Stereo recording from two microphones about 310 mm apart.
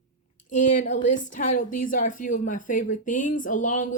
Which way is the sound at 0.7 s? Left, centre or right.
Left.